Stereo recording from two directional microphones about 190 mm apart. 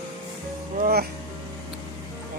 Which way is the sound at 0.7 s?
55° right (ahead or behind).